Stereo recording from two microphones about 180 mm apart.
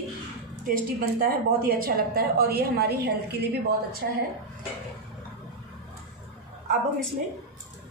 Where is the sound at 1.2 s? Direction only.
55° right (ahead or behind).